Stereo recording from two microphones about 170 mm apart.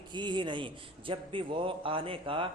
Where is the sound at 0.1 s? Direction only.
25° right (ahead or behind).